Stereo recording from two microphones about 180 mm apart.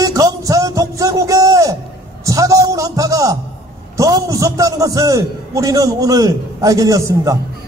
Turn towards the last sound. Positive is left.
turn(degrees=-15)  # may be behind; listen again after turning